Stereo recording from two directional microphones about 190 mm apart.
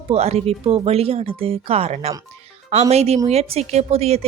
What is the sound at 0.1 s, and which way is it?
A woman's voice, 35° right (ahead or behind).